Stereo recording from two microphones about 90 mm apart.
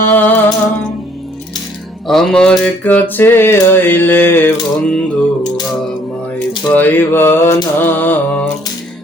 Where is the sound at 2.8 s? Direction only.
20° left (ahead or behind).